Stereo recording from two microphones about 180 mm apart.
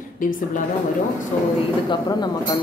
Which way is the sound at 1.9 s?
25° left (ahead or behind).